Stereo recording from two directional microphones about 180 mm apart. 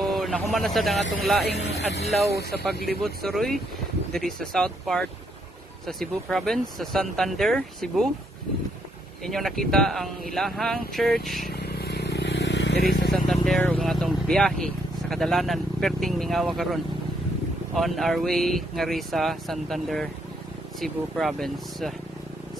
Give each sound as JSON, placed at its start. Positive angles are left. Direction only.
{"t": 0.0, "sound": "a man's voice", "side_deg": 0}
{"t": 1.5, "sound": "speech", "side_deg": 65}
{"t": 2.5, "sound": "speech", "side_deg": 0}
{"t": 9.2, "sound": "speech", "side_deg": 0}
{"t": 11.5, "sound": "vehicle", "side_deg": 65}
{"t": 13.1, "sound": "vehicle", "side_deg": 5}
{"t": 17.7, "sound": "speech", "side_deg": 0}